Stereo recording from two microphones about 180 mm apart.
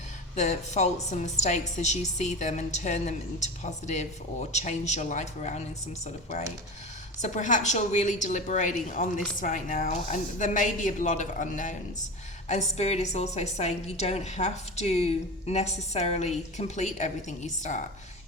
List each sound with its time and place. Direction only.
0.3 s a woman's voice: 40° left (ahead or behind)
7.2 s a woman's voice: 40° left (ahead or behind)